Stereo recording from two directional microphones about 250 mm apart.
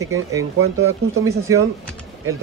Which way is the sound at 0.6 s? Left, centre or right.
Right.